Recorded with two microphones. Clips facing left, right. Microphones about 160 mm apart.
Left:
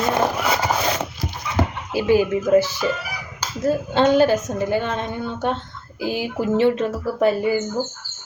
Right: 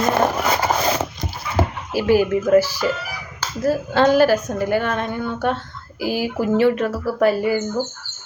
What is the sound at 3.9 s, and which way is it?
A woman's voice, 20° left (ahead or behind).